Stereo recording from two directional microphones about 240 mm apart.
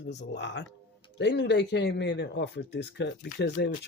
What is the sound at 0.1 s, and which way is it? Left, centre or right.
Speech, left.